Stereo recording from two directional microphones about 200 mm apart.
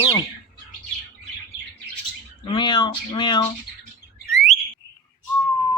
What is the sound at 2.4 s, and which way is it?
Speech, 25° left (ahead or behind).